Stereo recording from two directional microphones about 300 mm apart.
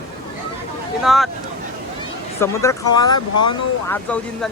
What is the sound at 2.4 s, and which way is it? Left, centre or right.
Speech, centre.